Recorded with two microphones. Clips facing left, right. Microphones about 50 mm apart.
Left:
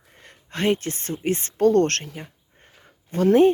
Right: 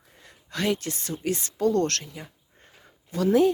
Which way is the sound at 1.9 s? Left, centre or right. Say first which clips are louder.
Left 4 dB; left.